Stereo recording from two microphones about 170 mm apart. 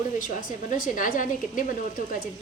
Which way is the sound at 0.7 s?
50° left (ahead or behind).